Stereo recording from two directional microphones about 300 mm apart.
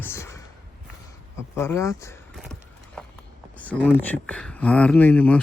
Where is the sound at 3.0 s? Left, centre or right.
Centre.